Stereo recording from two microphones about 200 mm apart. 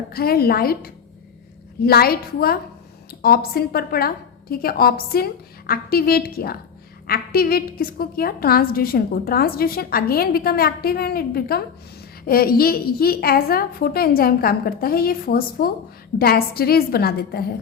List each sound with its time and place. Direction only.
0.1 s a woman's voice: 50° left (ahead or behind)